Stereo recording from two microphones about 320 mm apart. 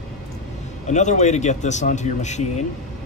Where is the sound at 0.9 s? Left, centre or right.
Left.